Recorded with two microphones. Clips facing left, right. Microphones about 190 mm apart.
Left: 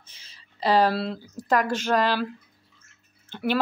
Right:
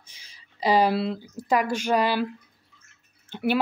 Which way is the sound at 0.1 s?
10° right (ahead or behind).